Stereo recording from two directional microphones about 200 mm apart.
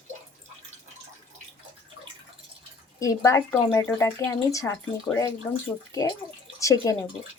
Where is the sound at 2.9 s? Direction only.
15° left (ahead or behind).